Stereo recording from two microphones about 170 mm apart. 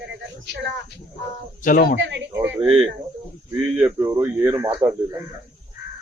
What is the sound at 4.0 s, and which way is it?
Speech, 15° right (ahead or behind).